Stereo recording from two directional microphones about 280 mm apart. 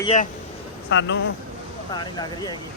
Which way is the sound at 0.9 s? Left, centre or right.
Left.